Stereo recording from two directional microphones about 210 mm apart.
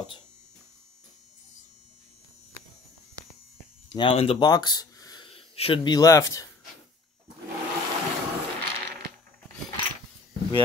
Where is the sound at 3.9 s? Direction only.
25° left (ahead or behind).